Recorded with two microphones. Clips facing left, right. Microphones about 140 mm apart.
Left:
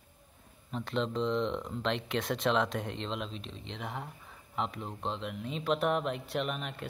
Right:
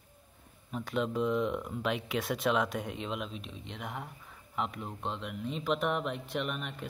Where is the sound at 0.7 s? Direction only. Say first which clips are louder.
Even; 5° right (ahead or behind).